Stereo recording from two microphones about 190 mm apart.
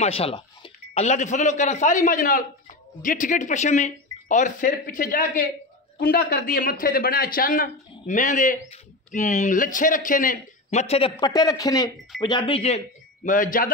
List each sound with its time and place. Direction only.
0.0 s a man's voice: 30° left (ahead or behind)